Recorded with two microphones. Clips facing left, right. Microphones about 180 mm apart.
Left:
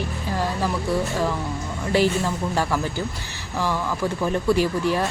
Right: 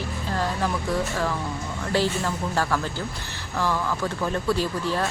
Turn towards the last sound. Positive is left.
turn(degrees=15)  # may be behind; listen again after turning